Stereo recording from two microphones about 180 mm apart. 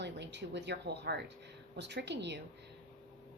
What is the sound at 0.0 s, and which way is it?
Speech, 70° right (ahead or behind).